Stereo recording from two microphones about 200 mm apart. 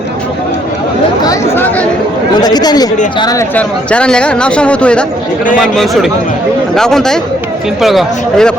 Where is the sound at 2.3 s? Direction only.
20° left (ahead or behind).